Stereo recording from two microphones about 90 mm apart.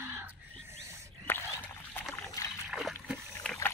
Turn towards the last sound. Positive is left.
turn(degrees=0)  # may be behind; listen again after turning